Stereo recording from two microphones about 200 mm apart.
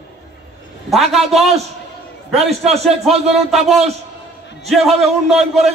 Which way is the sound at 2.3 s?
30° right (ahead or behind).